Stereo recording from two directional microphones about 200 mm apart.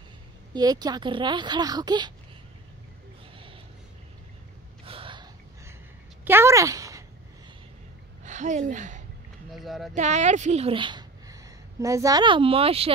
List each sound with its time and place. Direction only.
0.5 s speech: 20° right (ahead or behind)
4.8 s gasp: 25° right (ahead or behind)
6.2 s a sound: 10° right (ahead or behind)
8.2 s speech: 35° right (ahead or behind)
9.5 s speech: centre (ahead or behind)
9.9 s a woman's voice: 35° right (ahead or behind)